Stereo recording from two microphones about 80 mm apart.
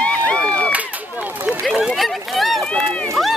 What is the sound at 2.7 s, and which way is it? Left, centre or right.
Run, centre.